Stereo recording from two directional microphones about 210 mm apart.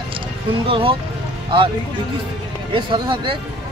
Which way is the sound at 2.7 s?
25° right (ahead or behind).